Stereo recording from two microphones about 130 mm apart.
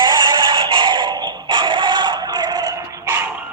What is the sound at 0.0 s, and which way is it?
Music, 35° right (ahead or behind).